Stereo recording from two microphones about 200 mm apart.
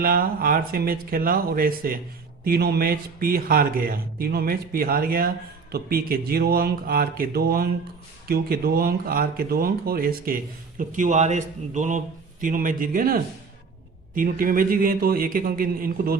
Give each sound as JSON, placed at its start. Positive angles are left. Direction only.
{"t": 0.0, "sound": "speech", "side_deg": -45}